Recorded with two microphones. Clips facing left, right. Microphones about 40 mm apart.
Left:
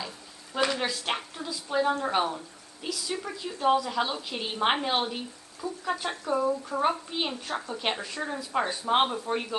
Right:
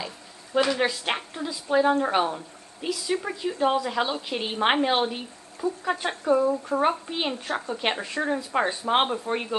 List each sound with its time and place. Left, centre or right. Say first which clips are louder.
0.7 s a woman's voice: right 4 dB; centre